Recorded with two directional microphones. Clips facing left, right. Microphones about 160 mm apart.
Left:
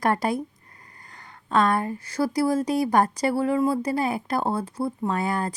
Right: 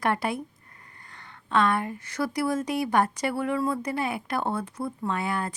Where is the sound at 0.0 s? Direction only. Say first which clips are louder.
Left 3 dB; 40° left (ahead or behind).